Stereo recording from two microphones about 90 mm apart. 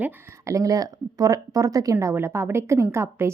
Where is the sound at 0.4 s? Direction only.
40° right (ahead or behind).